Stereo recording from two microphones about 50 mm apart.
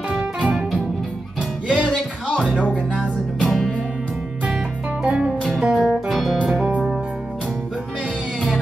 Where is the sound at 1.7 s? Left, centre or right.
Centre.